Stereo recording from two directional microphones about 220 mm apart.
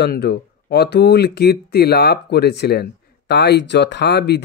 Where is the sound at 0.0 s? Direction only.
45° left (ahead or behind).